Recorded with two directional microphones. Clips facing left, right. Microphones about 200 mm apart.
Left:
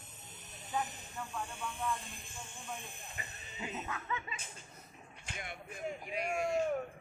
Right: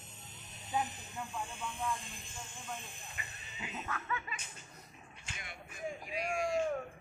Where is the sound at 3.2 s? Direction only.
40° left (ahead or behind).